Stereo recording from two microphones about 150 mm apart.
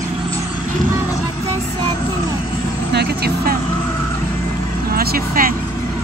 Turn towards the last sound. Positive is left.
turn(degrees=-80)